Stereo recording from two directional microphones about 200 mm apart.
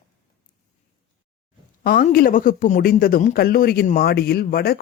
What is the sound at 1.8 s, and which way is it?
Speech, 45° left (ahead or behind).